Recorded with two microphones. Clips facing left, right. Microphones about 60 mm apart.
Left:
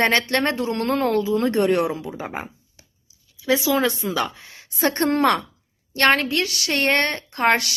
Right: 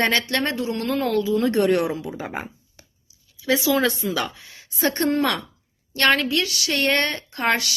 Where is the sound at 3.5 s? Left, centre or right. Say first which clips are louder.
Even; centre.